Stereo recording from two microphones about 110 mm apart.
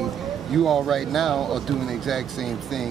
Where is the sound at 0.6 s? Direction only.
Centre (ahead or behind).